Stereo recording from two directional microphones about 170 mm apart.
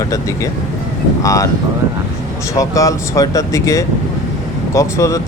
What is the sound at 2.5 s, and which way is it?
Speech, 20° left (ahead or behind).